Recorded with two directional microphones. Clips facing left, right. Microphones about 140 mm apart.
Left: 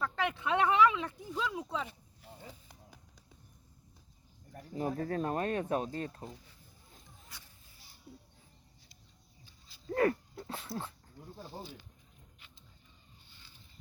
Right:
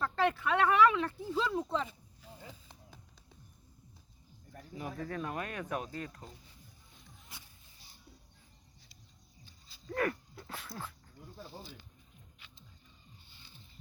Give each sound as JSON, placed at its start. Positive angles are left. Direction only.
{"t": 0.0, "sound": "speech", "side_deg": 20}
{"t": 1.2, "sound": "speech", "side_deg": -5}
{"t": 4.7, "sound": "speech", "side_deg": 40}
{"t": 9.9, "sound": "speech", "side_deg": 30}